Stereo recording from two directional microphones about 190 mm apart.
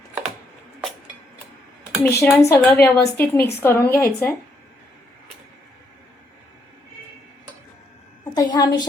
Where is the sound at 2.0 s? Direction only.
5° left (ahead or behind).